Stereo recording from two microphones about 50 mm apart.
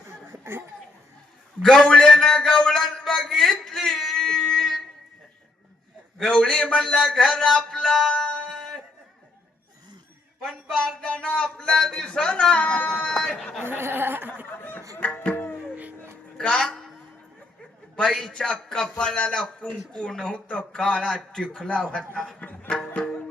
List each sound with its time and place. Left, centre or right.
1.6 s a man's voice: centre
6.2 s a man's voice: centre
8.4 s a sound: centre
10.4 s a man's voice: centre
11.0 s speech: left
13.6 s speech: right
14.6 s music: left
16.4 s speech: centre
17.9 s a man's voice: centre